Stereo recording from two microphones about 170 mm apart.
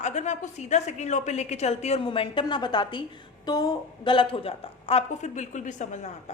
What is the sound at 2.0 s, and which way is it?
A woman's voice, 30° left (ahead or behind).